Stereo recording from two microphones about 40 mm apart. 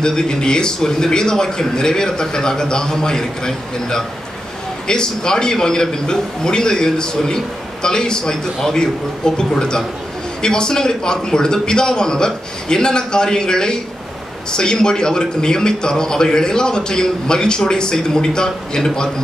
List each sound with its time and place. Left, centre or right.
0.0 s a man's voice: centre